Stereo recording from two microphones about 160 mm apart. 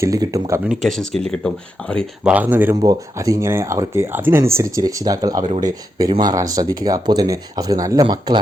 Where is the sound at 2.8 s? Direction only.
25° right (ahead or behind).